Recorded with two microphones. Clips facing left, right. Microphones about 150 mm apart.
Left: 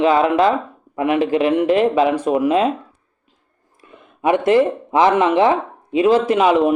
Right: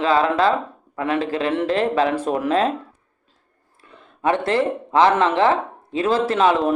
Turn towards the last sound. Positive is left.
turn(degrees=15)  # may be behind; listen again after turning